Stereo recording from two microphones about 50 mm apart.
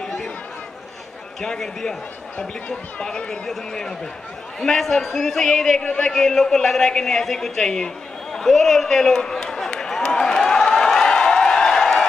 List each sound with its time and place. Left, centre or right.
1.4 s speech: centre
5.8 s speech: centre
6.1 s a sound: centre